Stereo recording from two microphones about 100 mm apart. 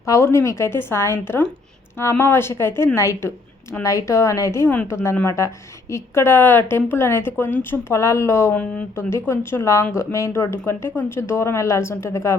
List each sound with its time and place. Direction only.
0.0 s a woman's voice: 30° left (ahead or behind)
8.5 s speech: 15° left (ahead or behind)
9.0 s a woman's voice: 25° left (ahead or behind)